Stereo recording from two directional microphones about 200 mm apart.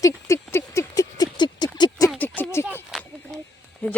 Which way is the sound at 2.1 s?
10° left (ahead or behind).